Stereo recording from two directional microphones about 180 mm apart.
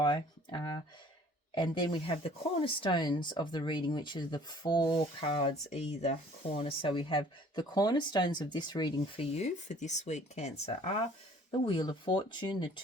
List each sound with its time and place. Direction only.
0.0 s speech: 25° left (ahead or behind)
11.6 s speech: 25° left (ahead or behind)